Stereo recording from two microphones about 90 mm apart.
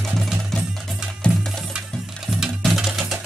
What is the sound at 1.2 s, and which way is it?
Music, 10° left (ahead or behind).